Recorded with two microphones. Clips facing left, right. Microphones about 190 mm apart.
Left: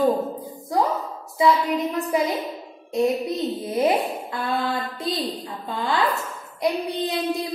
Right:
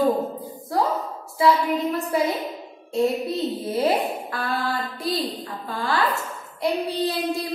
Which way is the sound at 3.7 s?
20° left (ahead or behind).